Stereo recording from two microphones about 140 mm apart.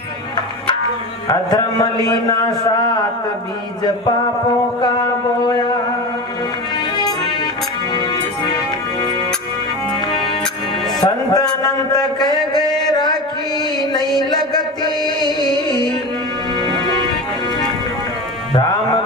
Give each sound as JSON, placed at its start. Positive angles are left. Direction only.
{"t": 1.3, "sound": "a man's voice", "side_deg": 25}
{"t": 11.0, "sound": "a man's voice", "side_deg": 30}
{"t": 14.3, "sound": "music", "side_deg": 30}